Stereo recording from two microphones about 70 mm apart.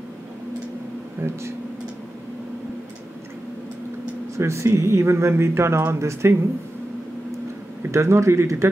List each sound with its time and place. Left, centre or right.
1.2 s speech: right
4.4 s speech: right
7.9 s speech: right